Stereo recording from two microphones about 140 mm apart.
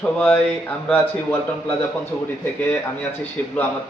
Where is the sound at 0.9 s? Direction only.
15° left (ahead or behind).